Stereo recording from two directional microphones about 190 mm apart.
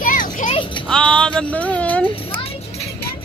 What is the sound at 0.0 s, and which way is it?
Children playing, 45° left (ahead or behind).